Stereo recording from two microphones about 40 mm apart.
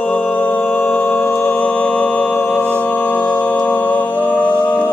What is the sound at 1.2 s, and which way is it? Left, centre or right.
Music, left.